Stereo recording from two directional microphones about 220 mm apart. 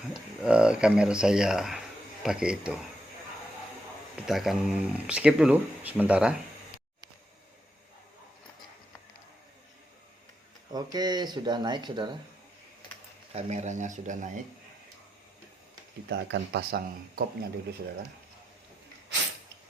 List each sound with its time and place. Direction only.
0.1 s speech: 5° right (ahead or behind)
4.3 s speech: centre (ahead or behind)
10.7 s speech: 20° right (ahead or behind)
13.3 s speech: 30° right (ahead or behind)
16.0 s speech: 50° right (ahead or behind)